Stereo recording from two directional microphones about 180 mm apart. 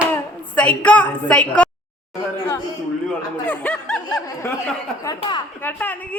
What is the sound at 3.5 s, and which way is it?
Speech, 5° left (ahead or behind).